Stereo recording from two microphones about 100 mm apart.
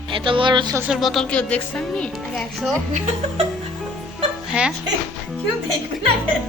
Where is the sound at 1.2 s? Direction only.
10° left (ahead or behind).